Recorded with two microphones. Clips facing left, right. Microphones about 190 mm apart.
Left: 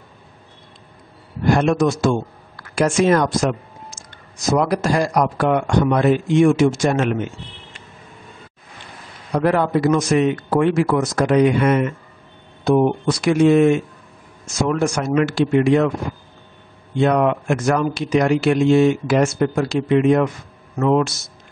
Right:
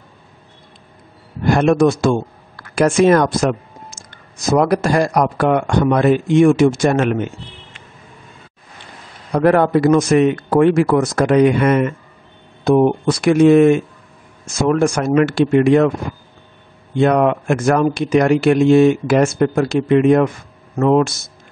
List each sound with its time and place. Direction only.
1.5 s speech: 55° right (ahead or behind)
9.3 s speech: 55° right (ahead or behind)
17.0 s speech: 50° right (ahead or behind)